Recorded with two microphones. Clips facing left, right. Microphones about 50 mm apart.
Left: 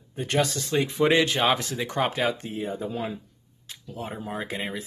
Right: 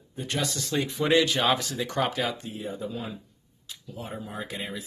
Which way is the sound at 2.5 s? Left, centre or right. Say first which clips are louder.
Left 4 dB; left.